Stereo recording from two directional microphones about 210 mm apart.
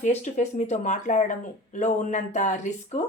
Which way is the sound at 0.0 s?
35° left (ahead or behind).